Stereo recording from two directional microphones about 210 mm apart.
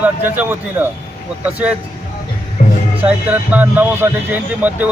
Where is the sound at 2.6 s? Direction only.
35° left (ahead or behind).